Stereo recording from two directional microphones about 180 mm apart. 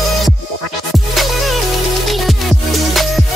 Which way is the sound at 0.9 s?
Centre (ahead or behind).